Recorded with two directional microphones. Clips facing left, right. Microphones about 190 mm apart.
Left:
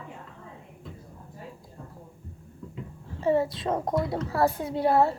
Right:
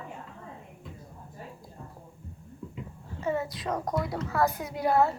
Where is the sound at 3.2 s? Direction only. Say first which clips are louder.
Left 6 dB; 30° left (ahead or behind).